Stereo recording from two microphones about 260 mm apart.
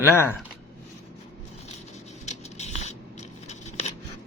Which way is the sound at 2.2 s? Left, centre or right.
Left.